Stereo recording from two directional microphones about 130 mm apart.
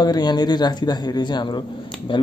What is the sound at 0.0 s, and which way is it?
Speech, 30° left (ahead or behind).